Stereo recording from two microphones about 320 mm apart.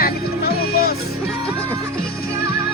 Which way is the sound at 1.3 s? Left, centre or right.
Centre.